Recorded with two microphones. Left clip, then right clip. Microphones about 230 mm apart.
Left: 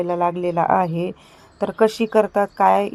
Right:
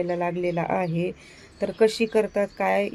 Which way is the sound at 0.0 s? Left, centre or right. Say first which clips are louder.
Left 5 dB; centre.